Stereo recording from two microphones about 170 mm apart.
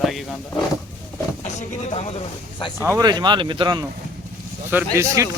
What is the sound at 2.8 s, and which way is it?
Speech, 20° right (ahead or behind).